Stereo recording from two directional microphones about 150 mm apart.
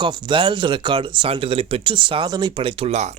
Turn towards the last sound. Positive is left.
turn(degrees=-50)  # may be behind; listen again after turning